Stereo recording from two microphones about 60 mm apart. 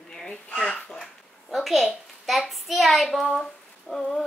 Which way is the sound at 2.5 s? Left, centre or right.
Centre.